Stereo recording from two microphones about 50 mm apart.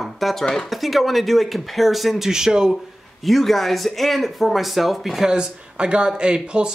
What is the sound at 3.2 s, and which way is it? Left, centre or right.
Speech, centre.